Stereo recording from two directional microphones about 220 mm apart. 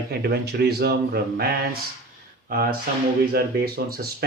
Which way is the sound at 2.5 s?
40° right (ahead or behind).